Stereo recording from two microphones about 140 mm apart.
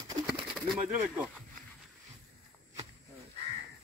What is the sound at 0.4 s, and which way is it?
Bird, 5° right (ahead or behind).